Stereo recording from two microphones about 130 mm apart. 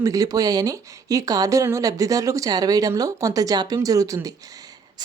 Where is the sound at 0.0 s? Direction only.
25° right (ahead or behind).